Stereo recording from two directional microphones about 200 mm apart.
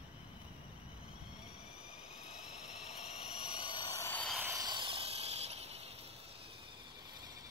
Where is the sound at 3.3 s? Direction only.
20° left (ahead or behind).